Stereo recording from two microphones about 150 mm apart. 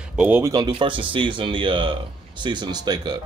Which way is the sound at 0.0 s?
10° right (ahead or behind).